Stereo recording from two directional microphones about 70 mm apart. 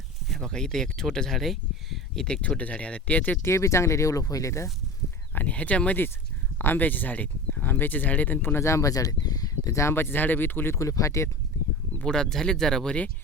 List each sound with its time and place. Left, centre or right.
0.3 s speech: centre
2.2 s speech: centre
3.4 s speech: left
5.3 s speech: left
9.9 s speech: left
10.8 s speech: left
12.0 s speech: centre